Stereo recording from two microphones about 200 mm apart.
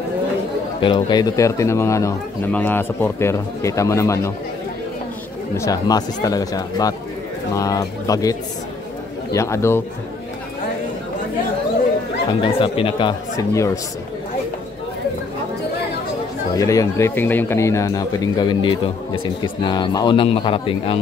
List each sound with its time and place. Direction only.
0.7 s speech: 25° left (ahead or behind)
5.6 s speech: 20° left (ahead or behind)
12.4 s a man's voice: 25° left (ahead or behind)
16.5 s a man's voice: 15° left (ahead or behind)